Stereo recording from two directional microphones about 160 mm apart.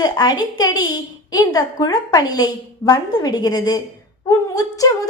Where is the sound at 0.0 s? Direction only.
25° left (ahead or behind).